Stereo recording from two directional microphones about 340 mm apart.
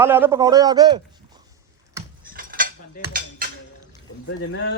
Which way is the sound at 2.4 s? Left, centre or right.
Right.